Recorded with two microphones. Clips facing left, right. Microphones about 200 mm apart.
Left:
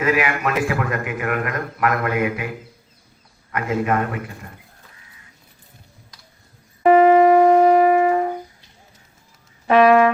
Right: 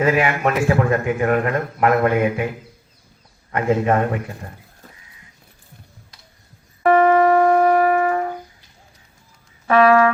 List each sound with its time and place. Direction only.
0.0 s a man's voice: 30° right (ahead or behind)
3.5 s a man's voice: 30° right (ahead or behind)
6.8 s music: 20° left (ahead or behind)
9.6 s music: 20° left (ahead or behind)